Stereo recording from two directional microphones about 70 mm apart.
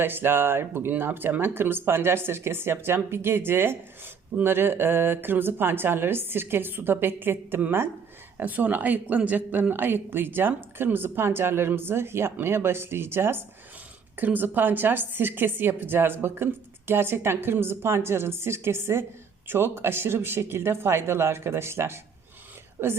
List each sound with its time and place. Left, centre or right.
0.0 s speech: right